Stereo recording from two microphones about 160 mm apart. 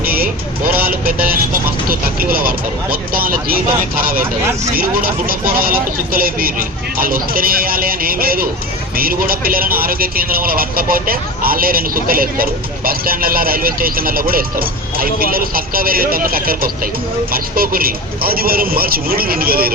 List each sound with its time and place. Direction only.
0.7 s speech: 10° right (ahead or behind)
1.0 s a man's voice: 65° right (ahead or behind)